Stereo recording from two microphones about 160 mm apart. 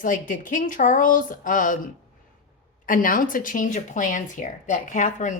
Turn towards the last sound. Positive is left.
turn(degrees=50)  # may be behind; listen again after turning